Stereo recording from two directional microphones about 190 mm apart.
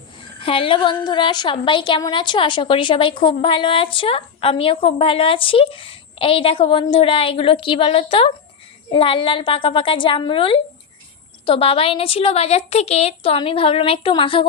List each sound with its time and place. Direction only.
0.4 s a woman's voice: 30° left (ahead or behind)